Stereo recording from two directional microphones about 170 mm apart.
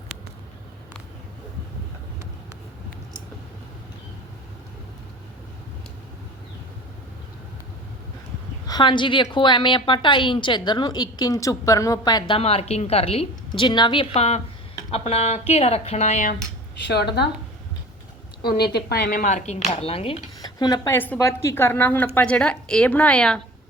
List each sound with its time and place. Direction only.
8.6 s a woman's voice: 25° left (ahead or behind)
12.3 s speech: 35° left (ahead or behind)
13.5 s speech: 25° left (ahead or behind); by 16.3 s 45° left (ahead or behind)
16.8 s a woman's voice: 75° left (ahead or behind)
18.4 s a woman's voice: 70° left (ahead or behind)
19.2 s speech: 45° left (ahead or behind)
20.4 s a woman's voice: 25° left (ahead or behind); by 23.4 s 5° left (ahead or behind)